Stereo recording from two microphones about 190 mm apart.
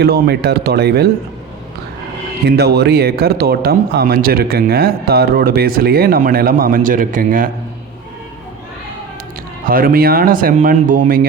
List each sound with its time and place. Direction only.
0.0 s speech: 60° right (ahead or behind)
2.5 s speech: 55° right (ahead or behind)
9.6 s speech: 50° right (ahead or behind)